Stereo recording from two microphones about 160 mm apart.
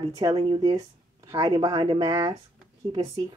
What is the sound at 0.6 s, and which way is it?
Speech, 25° right (ahead or behind).